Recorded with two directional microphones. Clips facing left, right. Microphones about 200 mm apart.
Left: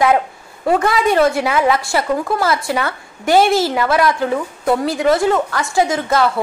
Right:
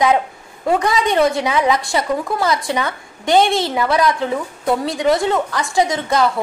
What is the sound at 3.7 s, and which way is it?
Speech, 20° right (ahead or behind).